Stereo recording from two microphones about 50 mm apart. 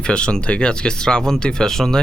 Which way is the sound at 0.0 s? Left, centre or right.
Centre.